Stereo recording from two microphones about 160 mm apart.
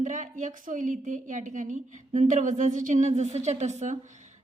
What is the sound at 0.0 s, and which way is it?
A woman's voice, 50° right (ahead or behind).